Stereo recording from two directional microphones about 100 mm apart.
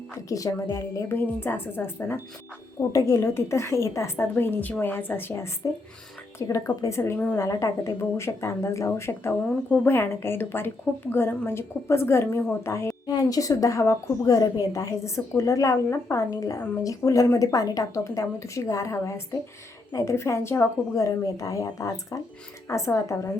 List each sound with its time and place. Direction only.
0.3 s a woman's voice: 35° left (ahead or behind)
6.5 s a woman's voice: 30° left (ahead or behind)
7.0 s a woman's voice: 20° left (ahead or behind)
7.3 s a woman's voice: 30° left (ahead or behind)
13.1 s a woman's voice: 40° left (ahead or behind)